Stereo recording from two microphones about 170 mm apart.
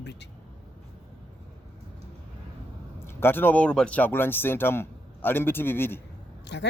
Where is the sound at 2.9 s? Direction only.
15° left (ahead or behind).